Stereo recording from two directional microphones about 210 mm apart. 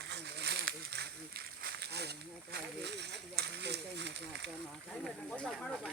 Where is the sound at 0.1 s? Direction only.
55° right (ahead or behind).